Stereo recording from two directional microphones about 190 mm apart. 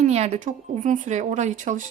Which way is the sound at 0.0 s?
35° right (ahead or behind).